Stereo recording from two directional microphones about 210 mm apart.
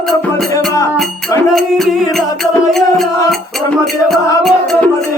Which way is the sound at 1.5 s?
Centre (ahead or behind).